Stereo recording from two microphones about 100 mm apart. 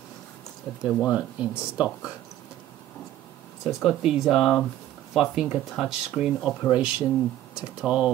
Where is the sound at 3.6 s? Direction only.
Centre (ahead or behind).